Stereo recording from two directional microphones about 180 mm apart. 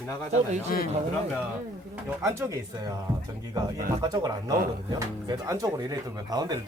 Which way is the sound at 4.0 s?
20° right (ahead or behind).